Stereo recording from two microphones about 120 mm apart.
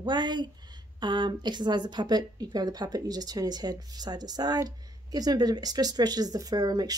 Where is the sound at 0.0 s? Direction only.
40° right (ahead or behind).